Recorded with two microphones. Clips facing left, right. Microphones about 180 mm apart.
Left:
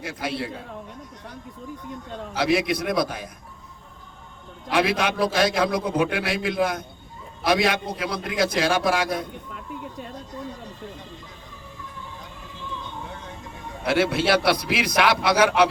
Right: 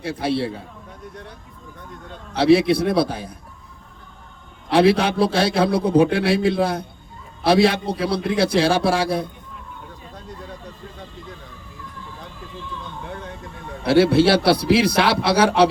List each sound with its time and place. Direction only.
0.0 s a man's voice: 30° right (ahead or behind)
2.3 s a man's voice: 30° right (ahead or behind)
4.7 s a man's voice: 30° right (ahead or behind)
13.8 s a man's voice: 30° right (ahead or behind)